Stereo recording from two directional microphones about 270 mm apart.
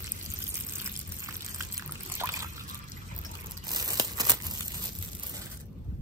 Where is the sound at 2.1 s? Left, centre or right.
Centre.